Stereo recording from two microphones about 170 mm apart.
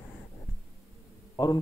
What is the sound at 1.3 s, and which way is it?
Speech, 25° left (ahead or behind).